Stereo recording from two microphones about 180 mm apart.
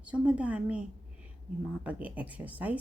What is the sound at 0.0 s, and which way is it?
A woman's voice, 5° right (ahead or behind).